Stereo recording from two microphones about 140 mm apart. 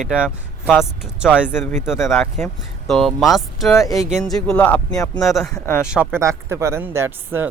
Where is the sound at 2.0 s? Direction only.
15° left (ahead or behind).